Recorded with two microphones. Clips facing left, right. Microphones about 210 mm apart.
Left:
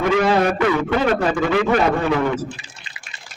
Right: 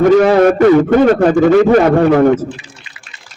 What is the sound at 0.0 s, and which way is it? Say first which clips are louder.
Speech: right 9 dB; 50° right (ahead or behind).